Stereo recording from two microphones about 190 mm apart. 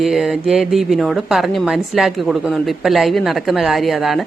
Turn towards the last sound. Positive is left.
turn(degrees=0)  # may be behind; listen again after turning